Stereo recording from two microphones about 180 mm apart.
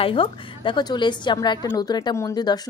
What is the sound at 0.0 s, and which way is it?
Speech, 30° left (ahead or behind).